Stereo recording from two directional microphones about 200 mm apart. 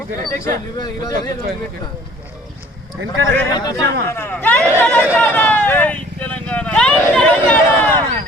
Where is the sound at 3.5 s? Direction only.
20° left (ahead or behind).